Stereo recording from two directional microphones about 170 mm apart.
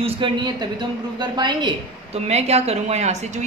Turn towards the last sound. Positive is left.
turn(degrees=-40)  # may be behind; listen again after turning